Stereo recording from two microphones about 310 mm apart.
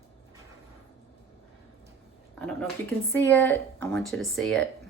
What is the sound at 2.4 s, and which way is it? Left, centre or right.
Speech, centre.